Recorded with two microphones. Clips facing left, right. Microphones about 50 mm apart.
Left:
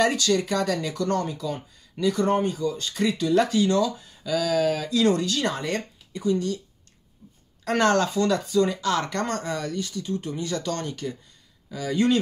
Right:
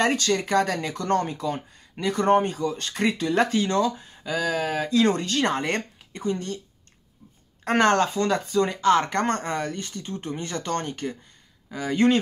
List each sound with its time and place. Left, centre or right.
0.0 s speech: right
7.6 s speech: right